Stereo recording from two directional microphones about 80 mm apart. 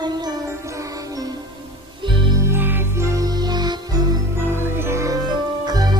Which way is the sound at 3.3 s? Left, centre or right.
Right.